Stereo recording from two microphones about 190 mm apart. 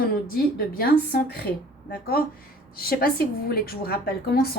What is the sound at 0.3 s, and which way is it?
A woman's voice, 50° left (ahead or behind).